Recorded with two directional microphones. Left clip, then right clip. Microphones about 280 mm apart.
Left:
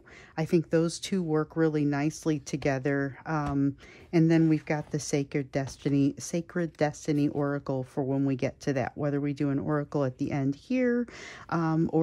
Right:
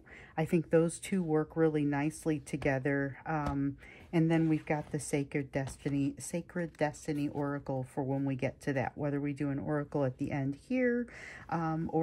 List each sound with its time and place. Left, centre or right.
0.4 s speech: centre
5.1 s speech: centre